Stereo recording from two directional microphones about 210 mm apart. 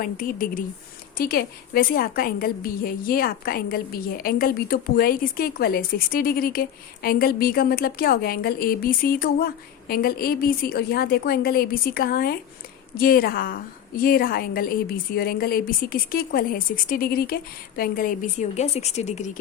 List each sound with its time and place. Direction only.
0.0 s a woman's voice: 40° left (ahead or behind)